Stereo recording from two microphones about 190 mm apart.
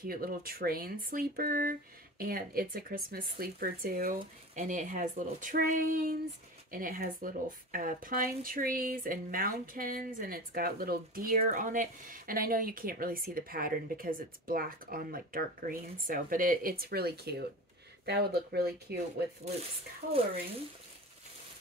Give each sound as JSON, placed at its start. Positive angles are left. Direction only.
{"t": 0.0, "sound": "speech", "side_deg": -50}